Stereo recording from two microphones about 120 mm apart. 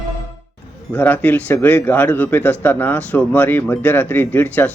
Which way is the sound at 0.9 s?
15° left (ahead or behind).